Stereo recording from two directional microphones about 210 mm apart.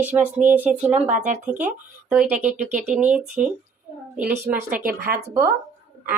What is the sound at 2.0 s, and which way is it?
Speech, 5° right (ahead or behind).